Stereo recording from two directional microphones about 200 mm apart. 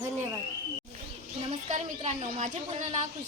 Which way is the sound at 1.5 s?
30° right (ahead or behind).